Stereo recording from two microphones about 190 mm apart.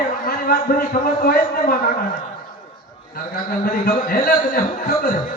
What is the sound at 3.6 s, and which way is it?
A man's voice, 50° left (ahead or behind).